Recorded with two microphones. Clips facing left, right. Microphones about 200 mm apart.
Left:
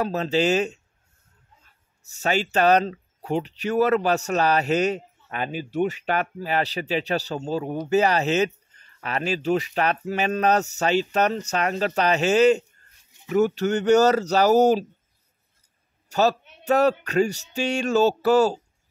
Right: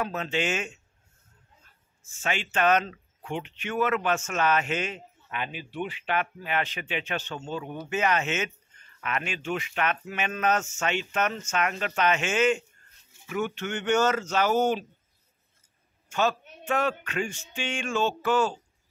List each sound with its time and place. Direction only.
0.0 s speech: 35° left (ahead or behind)
2.0 s speech: 40° left (ahead or behind)
16.1 s a man's voice: 40° left (ahead or behind)